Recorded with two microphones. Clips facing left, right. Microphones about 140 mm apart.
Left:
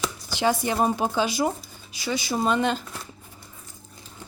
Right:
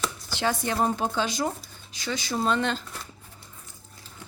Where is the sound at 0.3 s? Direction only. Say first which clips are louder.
Left 4 dB; 10° left (ahead or behind).